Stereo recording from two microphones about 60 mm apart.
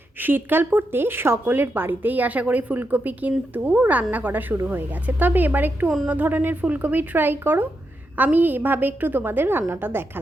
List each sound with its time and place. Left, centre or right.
0.2 s a woman's voice: right